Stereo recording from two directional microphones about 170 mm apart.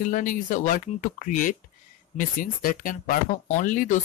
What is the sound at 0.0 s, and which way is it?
Speech, 50° left (ahead or behind).